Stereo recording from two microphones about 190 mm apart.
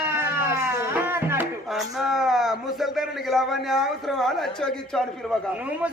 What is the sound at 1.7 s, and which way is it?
A man's voice, centre (ahead or behind).